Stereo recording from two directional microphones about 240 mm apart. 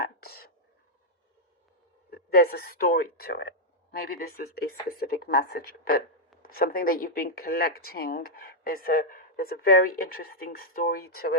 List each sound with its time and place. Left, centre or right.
0.0 s whispering: left
2.0 s speech: left